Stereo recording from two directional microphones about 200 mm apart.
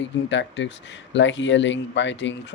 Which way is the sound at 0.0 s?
65° left (ahead or behind).